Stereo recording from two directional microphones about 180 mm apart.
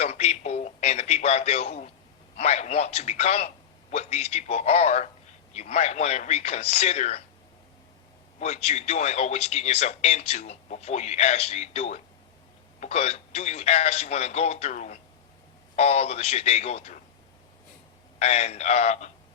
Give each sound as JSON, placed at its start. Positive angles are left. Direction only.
{"t": 0.0, "sound": "radio", "side_deg": 35}
{"t": 2.3, "sound": "speech", "side_deg": 35}
{"t": 8.4, "sound": "speech", "side_deg": 40}
{"t": 18.2, "sound": "speech", "side_deg": 35}